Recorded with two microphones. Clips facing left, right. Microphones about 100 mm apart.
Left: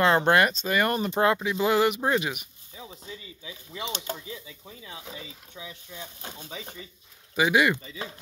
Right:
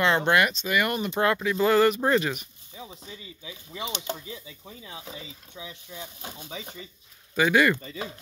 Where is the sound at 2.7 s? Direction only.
20° right (ahead or behind).